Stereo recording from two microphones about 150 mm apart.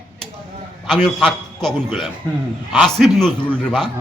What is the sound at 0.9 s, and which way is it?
Speech, 5° left (ahead or behind).